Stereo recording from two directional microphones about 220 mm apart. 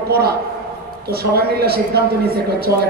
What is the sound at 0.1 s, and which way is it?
A man's voice, 45° right (ahead or behind).